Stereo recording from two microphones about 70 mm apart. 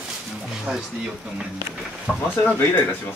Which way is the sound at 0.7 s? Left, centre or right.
Centre.